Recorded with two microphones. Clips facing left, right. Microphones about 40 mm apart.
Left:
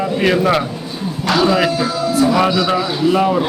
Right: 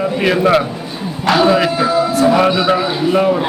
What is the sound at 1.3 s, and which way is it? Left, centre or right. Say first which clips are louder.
Speech: right 3 dB; centre.